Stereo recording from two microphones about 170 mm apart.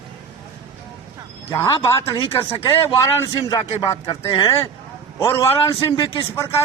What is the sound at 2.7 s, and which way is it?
A man's voice, 15° left (ahead or behind).